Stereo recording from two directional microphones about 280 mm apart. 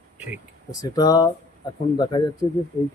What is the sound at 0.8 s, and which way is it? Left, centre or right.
Speech, centre.